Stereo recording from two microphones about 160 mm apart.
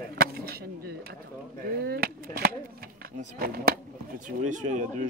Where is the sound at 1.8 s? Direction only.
75° right (ahead or behind).